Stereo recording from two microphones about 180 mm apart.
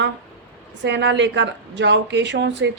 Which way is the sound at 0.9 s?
75° right (ahead or behind).